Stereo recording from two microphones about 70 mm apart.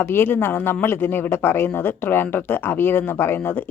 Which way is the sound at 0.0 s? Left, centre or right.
Left.